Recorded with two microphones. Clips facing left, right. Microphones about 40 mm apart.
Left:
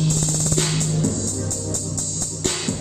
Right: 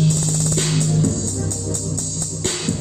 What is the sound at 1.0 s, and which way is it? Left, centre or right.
Music, left.